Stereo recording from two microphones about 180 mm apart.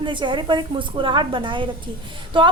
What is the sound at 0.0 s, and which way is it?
Speech, 25° right (ahead or behind).